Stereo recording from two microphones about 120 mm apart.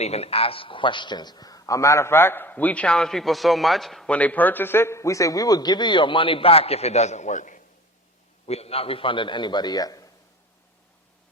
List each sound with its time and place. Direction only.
0.0 s a man's voice: 60° left (ahead or behind); by 7.6 s 90° left
8.4 s a man's voice: 60° left (ahead or behind); by 10.1 s 30° left (ahead or behind)